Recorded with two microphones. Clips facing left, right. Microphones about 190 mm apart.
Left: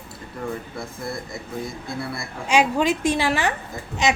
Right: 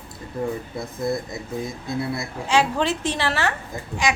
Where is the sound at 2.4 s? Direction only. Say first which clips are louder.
Left 2 dB; 15° left (ahead or behind).